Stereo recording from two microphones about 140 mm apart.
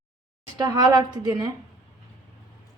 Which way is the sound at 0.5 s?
30° right (ahead or behind).